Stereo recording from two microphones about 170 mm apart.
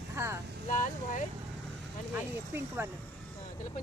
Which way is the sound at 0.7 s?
50° left (ahead or behind).